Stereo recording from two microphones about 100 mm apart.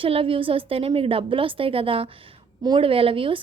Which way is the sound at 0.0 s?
65° right (ahead or behind).